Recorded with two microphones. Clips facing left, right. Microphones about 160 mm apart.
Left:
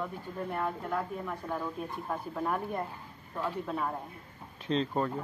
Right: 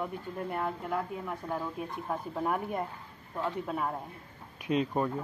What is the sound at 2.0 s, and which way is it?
Speech, 10° right (ahead or behind).